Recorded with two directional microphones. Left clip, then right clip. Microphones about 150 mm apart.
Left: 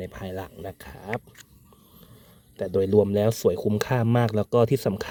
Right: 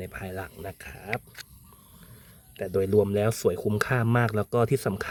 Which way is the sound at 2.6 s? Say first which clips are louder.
Left 3 dB; 20° left (ahead or behind).